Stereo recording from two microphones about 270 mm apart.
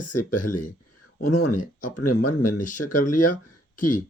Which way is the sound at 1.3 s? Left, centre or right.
Left.